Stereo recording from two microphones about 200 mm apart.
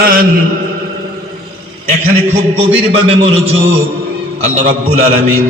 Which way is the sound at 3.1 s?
30° right (ahead or behind).